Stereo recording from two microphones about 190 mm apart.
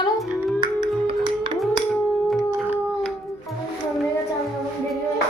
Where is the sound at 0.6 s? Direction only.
20° right (ahead or behind).